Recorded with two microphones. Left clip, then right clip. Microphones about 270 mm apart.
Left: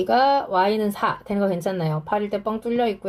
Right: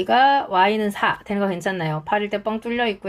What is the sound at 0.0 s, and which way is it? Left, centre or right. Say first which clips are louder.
Speech: right 2 dB; right.